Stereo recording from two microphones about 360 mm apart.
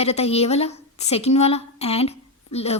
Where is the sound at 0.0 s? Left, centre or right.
Centre.